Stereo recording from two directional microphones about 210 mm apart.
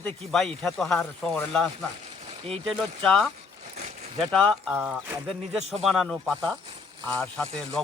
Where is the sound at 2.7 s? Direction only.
Centre (ahead or behind).